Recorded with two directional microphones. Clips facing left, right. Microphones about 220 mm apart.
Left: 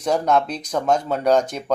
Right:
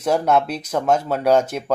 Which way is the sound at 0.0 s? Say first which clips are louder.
Right 1 dB; 5° right (ahead or behind).